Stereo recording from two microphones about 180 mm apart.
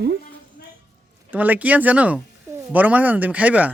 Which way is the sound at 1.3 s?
10° right (ahead or behind).